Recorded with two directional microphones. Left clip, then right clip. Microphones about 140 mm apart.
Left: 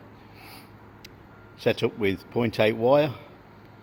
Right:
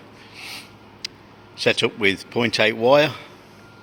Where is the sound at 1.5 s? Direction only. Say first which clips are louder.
Right 5 dB; 20° left (ahead or behind).